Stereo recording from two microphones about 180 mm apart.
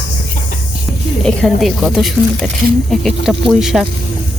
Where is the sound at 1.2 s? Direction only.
Centre (ahead or behind).